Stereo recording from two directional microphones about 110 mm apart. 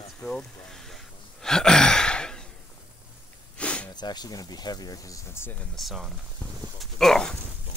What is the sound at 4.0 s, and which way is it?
Speech, 40° left (ahead or behind).